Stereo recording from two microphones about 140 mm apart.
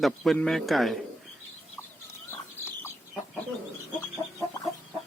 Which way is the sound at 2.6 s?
15° left (ahead or behind).